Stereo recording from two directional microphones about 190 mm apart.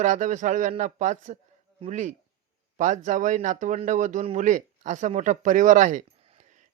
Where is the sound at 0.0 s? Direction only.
40° right (ahead or behind).